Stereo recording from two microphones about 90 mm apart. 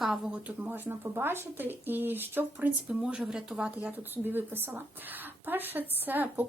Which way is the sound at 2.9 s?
10° right (ahead or behind).